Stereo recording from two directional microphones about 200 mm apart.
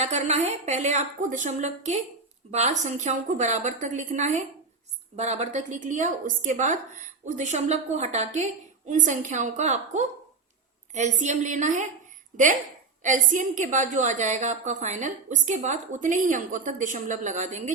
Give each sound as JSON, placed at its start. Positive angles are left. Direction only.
{"t": 0.0, "sound": "a woman's voice", "side_deg": -35}
{"t": 13.0, "sound": "a woman's voice", "side_deg": -40}